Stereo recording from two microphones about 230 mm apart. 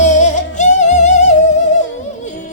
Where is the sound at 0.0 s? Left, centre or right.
Left.